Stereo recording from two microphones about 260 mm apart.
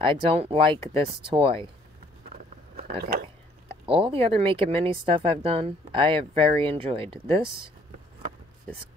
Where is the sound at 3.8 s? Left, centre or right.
Centre.